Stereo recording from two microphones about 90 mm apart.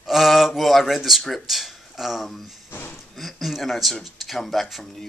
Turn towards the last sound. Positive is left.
turn(degrees=0)  # may be behind; listen again after turning